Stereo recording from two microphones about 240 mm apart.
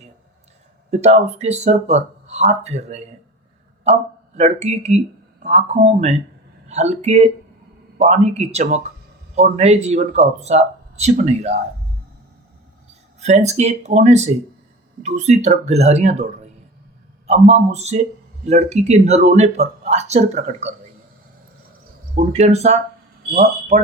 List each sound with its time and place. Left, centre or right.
0.9 s speech: right
4.4 s speech: right
13.1 s speech: right
22.1 s speech: right
23.2 s speech: right